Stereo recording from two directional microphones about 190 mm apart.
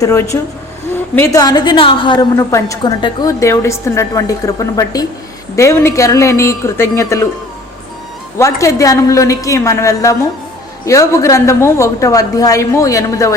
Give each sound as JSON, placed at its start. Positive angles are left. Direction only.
{"t": 0.0, "sound": "a woman's voice", "side_deg": 15}
{"t": 8.4, "sound": "a woman's voice", "side_deg": 15}